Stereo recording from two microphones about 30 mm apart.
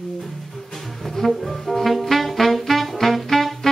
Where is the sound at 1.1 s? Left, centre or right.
Centre.